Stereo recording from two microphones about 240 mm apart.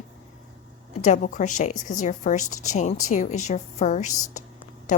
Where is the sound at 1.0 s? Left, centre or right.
Left.